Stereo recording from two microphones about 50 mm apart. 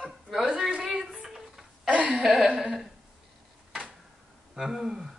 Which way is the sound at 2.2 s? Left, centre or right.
Centre.